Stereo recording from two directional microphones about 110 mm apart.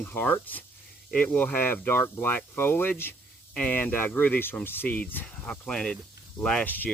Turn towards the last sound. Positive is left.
turn(degrees=15)  # may be behind; listen again after turning